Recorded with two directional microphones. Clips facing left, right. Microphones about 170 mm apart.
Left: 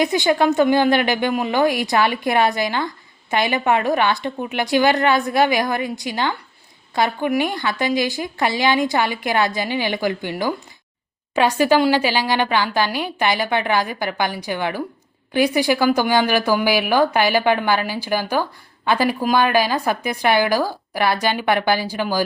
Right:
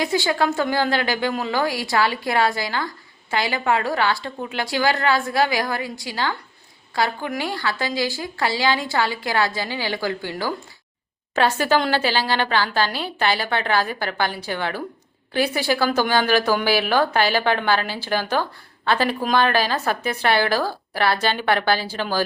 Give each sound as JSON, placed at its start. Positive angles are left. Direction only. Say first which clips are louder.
{"t": 0.0, "sound": "a woman's voice", "louder": "left 4 dB", "side_deg": 20}